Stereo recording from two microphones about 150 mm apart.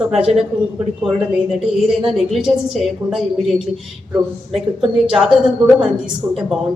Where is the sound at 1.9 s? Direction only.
Centre (ahead or behind).